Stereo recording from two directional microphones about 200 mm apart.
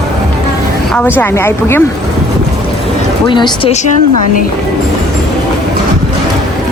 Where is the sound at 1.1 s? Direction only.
10° left (ahead or behind).